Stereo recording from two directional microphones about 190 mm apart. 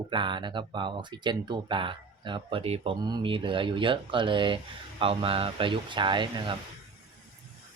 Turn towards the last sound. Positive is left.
turn(degrees=-25)  # may be behind; listen again after turning